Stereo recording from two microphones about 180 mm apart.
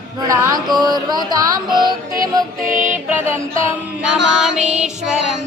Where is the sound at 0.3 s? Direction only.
20° right (ahead or behind).